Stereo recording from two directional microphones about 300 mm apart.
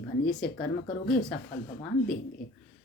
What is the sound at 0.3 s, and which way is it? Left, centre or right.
Speech, centre.